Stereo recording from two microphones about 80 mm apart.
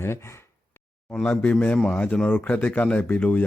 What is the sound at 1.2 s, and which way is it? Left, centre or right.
Speech, left.